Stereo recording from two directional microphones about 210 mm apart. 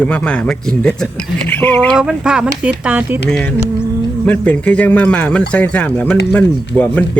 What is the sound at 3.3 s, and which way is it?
Speech, 5° left (ahead or behind).